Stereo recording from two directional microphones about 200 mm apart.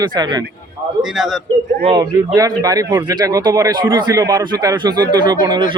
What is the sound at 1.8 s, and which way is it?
A man's voice, 20° right (ahead or behind).